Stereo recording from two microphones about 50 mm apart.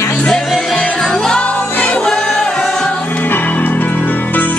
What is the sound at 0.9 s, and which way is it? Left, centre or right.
Music, centre.